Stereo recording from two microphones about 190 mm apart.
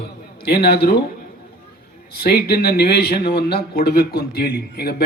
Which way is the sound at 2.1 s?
55° left (ahead or behind).